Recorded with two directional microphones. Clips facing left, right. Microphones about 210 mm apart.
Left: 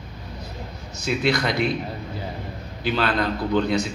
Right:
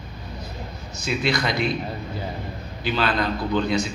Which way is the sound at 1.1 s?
55° left (ahead or behind).